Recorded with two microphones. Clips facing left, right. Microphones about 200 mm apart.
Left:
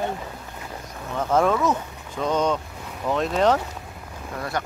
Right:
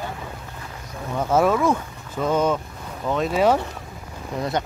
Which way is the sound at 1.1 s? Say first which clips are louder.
Right 1 dB; 10° right (ahead or behind).